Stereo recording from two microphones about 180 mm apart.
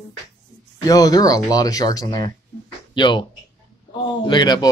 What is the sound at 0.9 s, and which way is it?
Speech, 20° left (ahead or behind).